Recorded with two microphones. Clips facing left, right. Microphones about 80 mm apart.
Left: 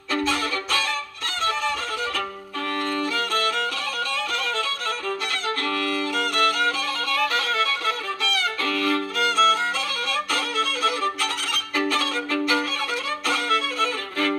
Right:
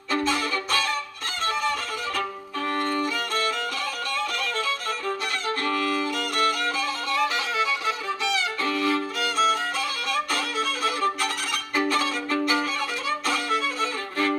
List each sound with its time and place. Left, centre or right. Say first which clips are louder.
5.7 s violin: right 2 dB; centre
6.1 s music: left 3 dB; left
7.1 s violin: left 2 dB; centre
8.2 s music: left 1 dB; centre
9.2 s music: left 5 dB; left
13.3 s violin: left 4 dB; left